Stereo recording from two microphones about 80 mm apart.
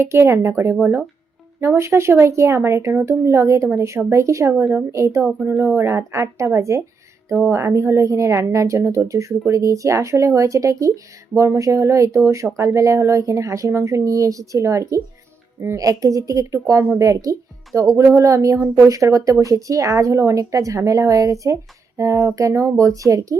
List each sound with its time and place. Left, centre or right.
0.0 s speech: right